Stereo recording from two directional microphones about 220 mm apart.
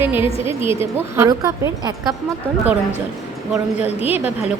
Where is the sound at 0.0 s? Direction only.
10° right (ahead or behind).